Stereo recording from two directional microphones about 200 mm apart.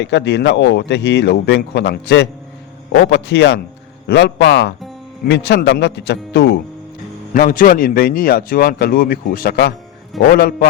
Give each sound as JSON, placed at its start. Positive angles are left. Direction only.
{"t": 0.0, "sound": "speech", "side_deg": 60}
{"t": 7.3, "sound": "speech", "side_deg": 45}